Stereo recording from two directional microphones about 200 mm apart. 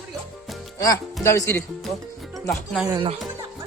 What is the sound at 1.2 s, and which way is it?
Music, 10° left (ahead or behind).